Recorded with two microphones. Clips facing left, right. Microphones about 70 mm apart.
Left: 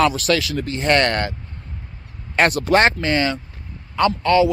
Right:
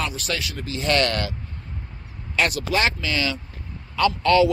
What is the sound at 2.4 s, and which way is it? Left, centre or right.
Speech, left.